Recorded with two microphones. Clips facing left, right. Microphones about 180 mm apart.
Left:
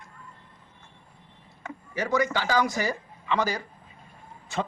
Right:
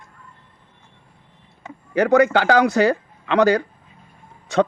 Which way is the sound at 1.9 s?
65° right (ahead or behind).